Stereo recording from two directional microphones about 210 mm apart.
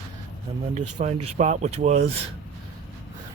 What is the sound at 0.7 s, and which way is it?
Speech, 30° right (ahead or behind).